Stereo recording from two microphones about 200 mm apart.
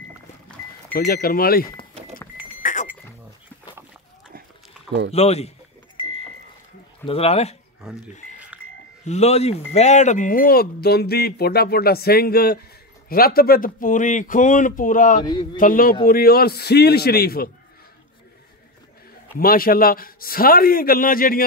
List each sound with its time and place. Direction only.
0.9 s speech: 50° left (ahead or behind)
2.6 s goat: 40° left (ahead or behind)
5.1 s speech: 30° left (ahead or behind)
7.1 s speech: 30° left (ahead or behind)
8.1 s music: 35° left (ahead or behind)
9.0 s speech: 35° left (ahead or behind); by 17.5 s 50° left (ahead or behind)
19.3 s speech: 45° left (ahead or behind)